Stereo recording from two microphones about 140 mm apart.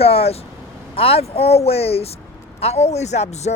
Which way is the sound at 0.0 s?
45° left (ahead or behind).